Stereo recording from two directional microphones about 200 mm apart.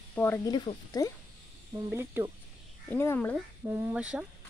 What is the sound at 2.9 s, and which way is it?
Speech, 10° left (ahead or behind).